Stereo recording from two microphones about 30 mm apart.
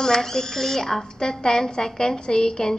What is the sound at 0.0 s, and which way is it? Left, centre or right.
A woman's voice, centre.